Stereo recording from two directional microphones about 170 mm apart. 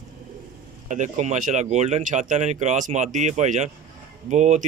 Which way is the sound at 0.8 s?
45° right (ahead or behind).